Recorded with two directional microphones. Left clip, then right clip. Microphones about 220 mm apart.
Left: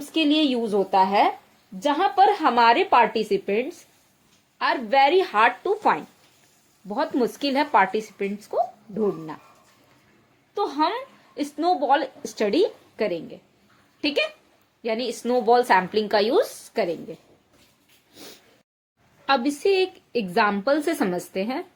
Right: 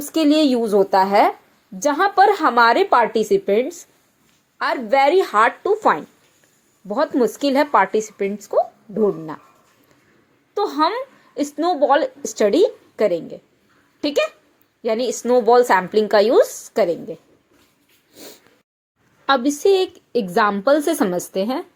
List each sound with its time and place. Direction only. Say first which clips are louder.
0.1 s a woman's voice: right 5 dB; 25° right (ahead or behind)
10.5 s a woman's voice: right 5 dB; 15° right (ahead or behind)
18.1 s snort: right 3 dB; 10° right (ahead or behind)
19.3 s a woman's voice: right 5 dB; 15° right (ahead or behind)